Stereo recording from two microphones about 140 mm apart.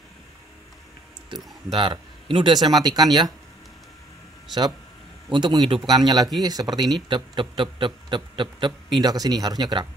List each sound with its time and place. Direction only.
1.7 s speech: 35° right (ahead or behind)
5.3 s speech: 30° right (ahead or behind)